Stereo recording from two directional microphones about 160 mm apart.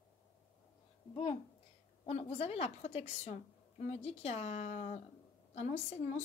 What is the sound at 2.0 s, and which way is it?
Speech, 40° left (ahead or behind).